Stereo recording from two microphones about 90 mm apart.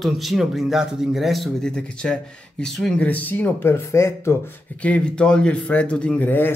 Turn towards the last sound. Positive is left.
turn(degrees=20)  # may be behind; listen again after turning